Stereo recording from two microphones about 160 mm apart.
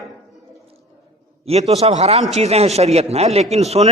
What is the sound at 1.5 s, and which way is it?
A man's voice, 40° right (ahead or behind).